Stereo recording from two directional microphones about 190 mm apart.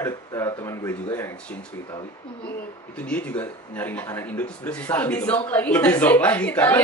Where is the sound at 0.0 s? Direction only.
15° left (ahead or behind).